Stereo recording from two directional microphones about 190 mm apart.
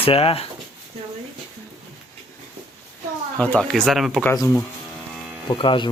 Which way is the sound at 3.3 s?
5° left (ahead or behind).